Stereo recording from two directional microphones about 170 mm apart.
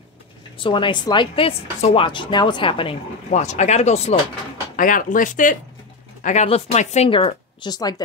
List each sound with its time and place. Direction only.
0.6 s a woman's voice: 30° left (ahead or behind)
4.7 s a woman's voice: 50° left (ahead or behind); by 7.9 s 25° left (ahead or behind)